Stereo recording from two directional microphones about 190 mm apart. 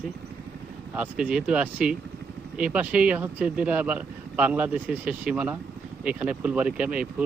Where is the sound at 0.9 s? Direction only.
5° right (ahead or behind).